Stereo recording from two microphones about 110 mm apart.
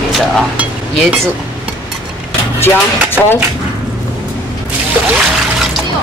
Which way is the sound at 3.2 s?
20° right (ahead or behind).